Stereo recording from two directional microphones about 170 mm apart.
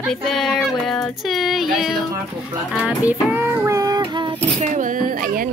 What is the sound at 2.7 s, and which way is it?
Child singing, 5° right (ahead or behind).